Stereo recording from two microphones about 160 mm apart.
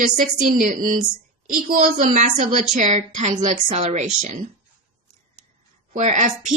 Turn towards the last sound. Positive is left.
turn(degrees=-50)  # may be behind; listen again after turning